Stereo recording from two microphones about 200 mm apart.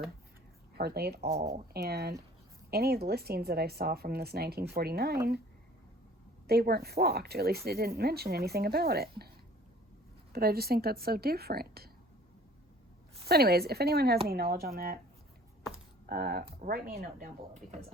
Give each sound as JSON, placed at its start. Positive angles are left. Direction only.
{"t": 0.8, "sound": "speech", "side_deg": -50}
{"t": 6.5, "sound": "speech", "side_deg": -50}
{"t": 10.3, "sound": "speech", "side_deg": -50}
{"t": 13.2, "sound": "speech", "side_deg": -50}
{"t": 15.7, "sound": "keys jangling", "side_deg": -50}
{"t": 16.6, "sound": "speech", "side_deg": -45}